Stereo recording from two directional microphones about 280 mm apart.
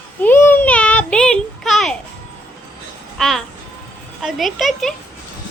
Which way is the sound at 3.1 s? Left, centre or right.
Centre.